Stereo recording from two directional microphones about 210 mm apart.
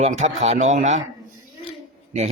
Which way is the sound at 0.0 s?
30° right (ahead or behind).